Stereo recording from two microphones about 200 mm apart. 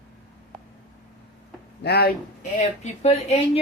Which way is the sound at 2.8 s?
35° left (ahead or behind).